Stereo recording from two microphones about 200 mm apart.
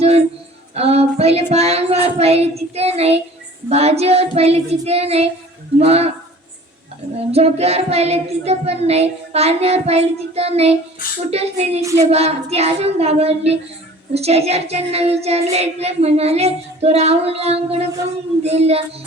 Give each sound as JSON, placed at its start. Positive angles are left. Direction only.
{"t": 0.7, "sound": "child singing", "side_deg": -30}
{"t": 7.2, "sound": "child singing", "side_deg": -30}
{"t": 11.8, "sound": "speech", "side_deg": -15}
{"t": 12.1, "sound": "child singing", "side_deg": -30}